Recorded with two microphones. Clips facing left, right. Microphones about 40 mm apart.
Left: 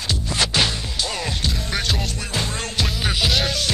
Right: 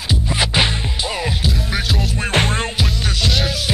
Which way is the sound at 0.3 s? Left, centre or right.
Right.